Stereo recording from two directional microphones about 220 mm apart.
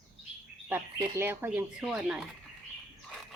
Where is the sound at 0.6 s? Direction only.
10° right (ahead or behind).